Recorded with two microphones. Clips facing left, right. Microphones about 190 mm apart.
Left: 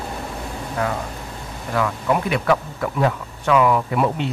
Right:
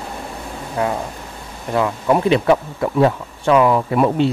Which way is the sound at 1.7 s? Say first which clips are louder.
Right 4 dB; 25° right (ahead or behind).